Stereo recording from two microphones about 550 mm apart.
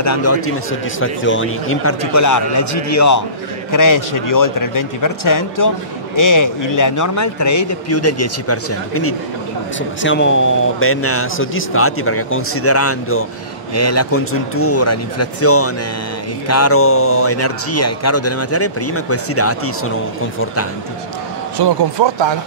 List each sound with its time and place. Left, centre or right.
0.0 s a man's voice: left
21.5 s speech: right